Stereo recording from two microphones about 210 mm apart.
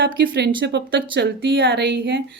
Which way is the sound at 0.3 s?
45° right (ahead or behind).